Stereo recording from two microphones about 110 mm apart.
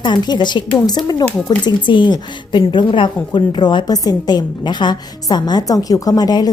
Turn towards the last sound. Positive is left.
turn(degrees=35)  # may be behind; listen again after turning